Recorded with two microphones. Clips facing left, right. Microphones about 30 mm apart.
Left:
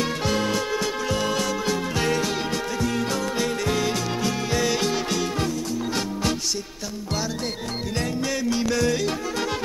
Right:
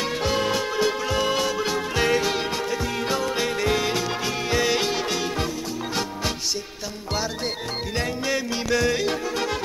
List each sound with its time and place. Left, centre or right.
0.2 s music: centre
7.9 s music: centre